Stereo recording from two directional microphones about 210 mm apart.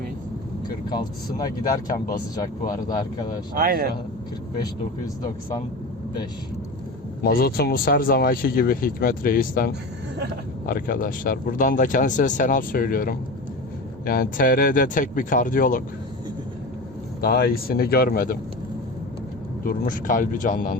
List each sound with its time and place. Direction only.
1.4 s speech: 20° left (ahead or behind)
3.5 s speech: 45° right (ahead or behind)
7.2 s speech: 45° left (ahead or behind)
17.2 s speech: 45° left (ahead or behind)
19.6 s speech: 40° left (ahead or behind)